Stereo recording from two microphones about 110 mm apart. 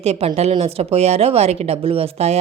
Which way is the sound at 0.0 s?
70° right (ahead or behind).